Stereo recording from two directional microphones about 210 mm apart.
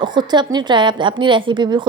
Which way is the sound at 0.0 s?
20° right (ahead or behind).